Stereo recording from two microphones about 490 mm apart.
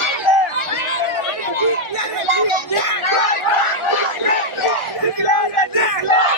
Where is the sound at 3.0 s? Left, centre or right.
Left.